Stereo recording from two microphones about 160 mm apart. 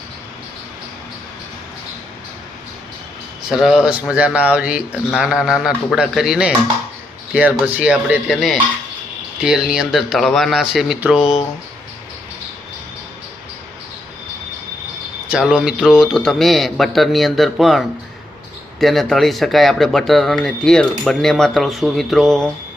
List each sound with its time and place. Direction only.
3.5 s speech: centre (ahead or behind)
11.2 s speech: 40° left (ahead or behind)
15.3 s speech: 5° right (ahead or behind)